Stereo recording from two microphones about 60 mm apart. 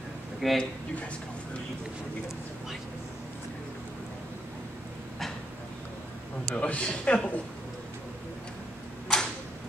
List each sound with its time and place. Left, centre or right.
0.4 s speech: centre
6.5 s a man's voice: left
6.9 s a man's voice: centre
9.1 s a sound: centre